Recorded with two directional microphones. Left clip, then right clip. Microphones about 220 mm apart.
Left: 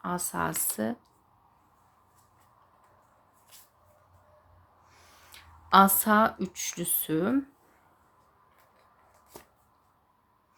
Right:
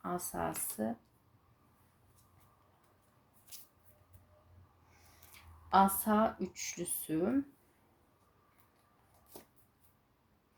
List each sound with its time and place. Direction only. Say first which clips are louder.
0.0 s speech: left 7 dB; 20° left (ahead or behind)
5.3 s a sound: left 7 dB; 20° left (ahead or behind)
5.7 s speech: left 8 dB; 30° left (ahead or behind)